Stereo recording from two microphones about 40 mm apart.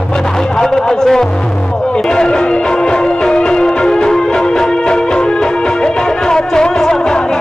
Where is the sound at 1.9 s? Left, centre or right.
Left.